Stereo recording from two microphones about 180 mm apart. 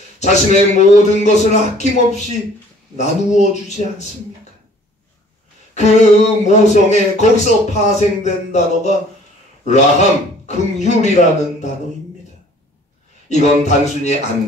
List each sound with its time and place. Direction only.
0.2 s speech: 40° left (ahead or behind)
5.8 s speech: 40° left (ahead or behind)
13.3 s speech: 40° left (ahead or behind)